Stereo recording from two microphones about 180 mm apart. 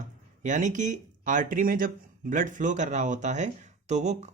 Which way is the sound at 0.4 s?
45° right (ahead or behind).